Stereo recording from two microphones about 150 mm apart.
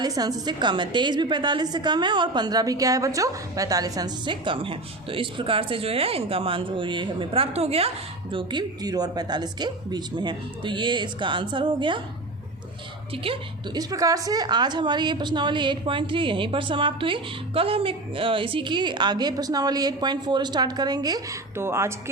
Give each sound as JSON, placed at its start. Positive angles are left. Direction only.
{"t": 0.0, "sound": "a woman's voice", "side_deg": -25}
{"t": 13.2, "sound": "a woman's voice", "side_deg": -35}
{"t": 13.9, "sound": "a woman's voice", "side_deg": -25}